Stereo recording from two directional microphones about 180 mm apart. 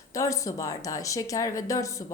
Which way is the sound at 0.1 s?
20° left (ahead or behind).